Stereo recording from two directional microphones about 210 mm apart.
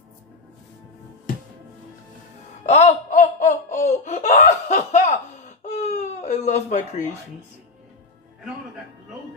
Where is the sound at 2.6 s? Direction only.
35° left (ahead or behind).